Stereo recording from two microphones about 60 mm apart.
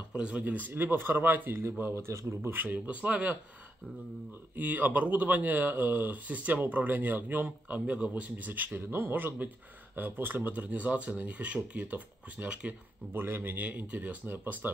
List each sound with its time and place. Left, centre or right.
0.1 s speech: centre
4.6 s speech: right
13.1 s speech: right
14.2 s speech: right